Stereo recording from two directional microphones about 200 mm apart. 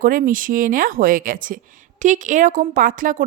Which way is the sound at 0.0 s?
45° right (ahead or behind).